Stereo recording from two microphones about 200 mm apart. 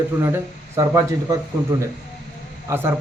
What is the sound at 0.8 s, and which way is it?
Speech, 15° right (ahead or behind).